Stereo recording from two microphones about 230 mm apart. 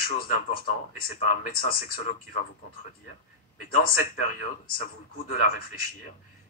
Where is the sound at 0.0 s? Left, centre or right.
Left.